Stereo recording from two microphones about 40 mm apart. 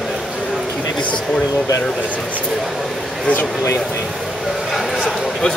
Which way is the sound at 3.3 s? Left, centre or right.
Left.